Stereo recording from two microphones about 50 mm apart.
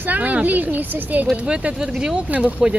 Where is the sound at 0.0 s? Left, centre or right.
Right.